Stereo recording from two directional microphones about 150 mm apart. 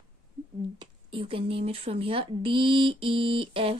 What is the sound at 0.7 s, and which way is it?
Speech, 35° right (ahead or behind).